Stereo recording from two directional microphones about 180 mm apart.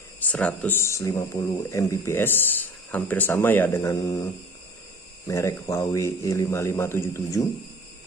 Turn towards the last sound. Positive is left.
turn(degrees=15)  # may be behind; listen again after turning